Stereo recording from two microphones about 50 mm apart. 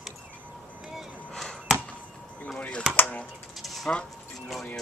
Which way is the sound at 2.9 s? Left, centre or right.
Left.